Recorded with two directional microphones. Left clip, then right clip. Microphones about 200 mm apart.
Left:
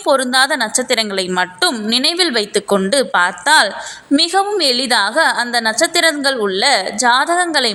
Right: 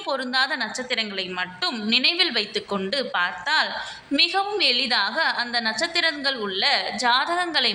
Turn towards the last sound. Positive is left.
turn(degrees=40)  # may be behind; listen again after turning